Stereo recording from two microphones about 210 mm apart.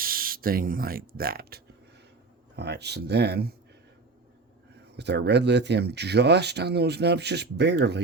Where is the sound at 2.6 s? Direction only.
50° right (ahead or behind).